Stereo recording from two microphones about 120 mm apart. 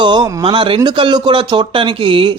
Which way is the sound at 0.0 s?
40° right (ahead or behind).